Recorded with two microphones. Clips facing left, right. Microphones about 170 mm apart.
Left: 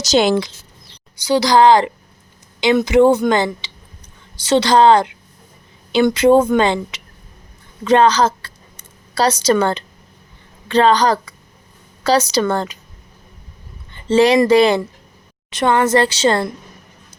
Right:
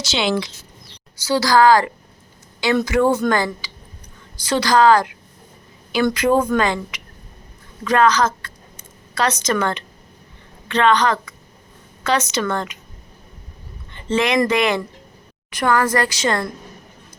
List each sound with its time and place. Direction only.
0.0 s speech: 45° left (ahead or behind)
1.2 s a woman's voice: 20° left (ahead or behind); by 12.8 s 35° left (ahead or behind)
14.1 s a woman's voice: 30° left (ahead or behind)